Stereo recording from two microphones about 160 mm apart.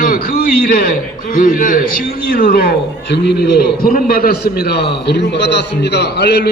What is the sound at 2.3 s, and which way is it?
A man's voice, 70° left (ahead or behind).